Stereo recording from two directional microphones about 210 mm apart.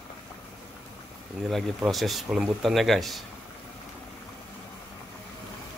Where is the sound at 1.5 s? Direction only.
Centre (ahead or behind).